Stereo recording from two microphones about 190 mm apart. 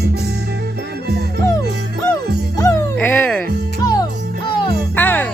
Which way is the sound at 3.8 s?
20° left (ahead or behind).